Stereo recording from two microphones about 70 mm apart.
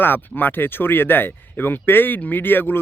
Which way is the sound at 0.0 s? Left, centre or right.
Left.